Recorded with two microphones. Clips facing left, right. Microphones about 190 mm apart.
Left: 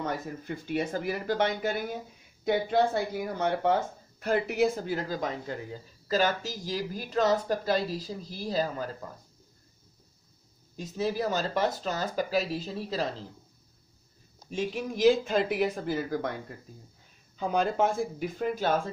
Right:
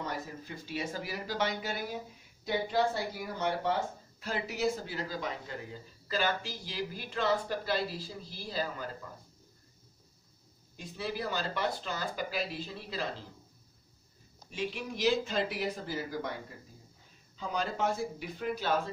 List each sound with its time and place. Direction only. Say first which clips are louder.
0.0 s speech: left 5 dB; 55° left (ahead or behind)
10.8 s speech: left 7 dB; 45° left (ahead or behind)
14.5 s speech: left 5 dB; 45° left (ahead or behind)
17.4 s speech: left 7 dB; 55° left (ahead or behind)